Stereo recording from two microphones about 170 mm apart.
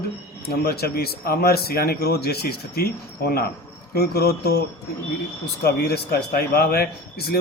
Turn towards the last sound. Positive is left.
turn(degrees=65)  # may be behind; listen again after turning